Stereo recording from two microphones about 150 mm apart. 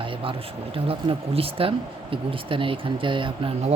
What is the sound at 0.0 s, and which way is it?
Speech, 35° right (ahead or behind).